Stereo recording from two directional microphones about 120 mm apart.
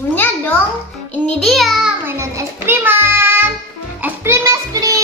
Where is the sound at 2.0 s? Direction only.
20° right (ahead or behind).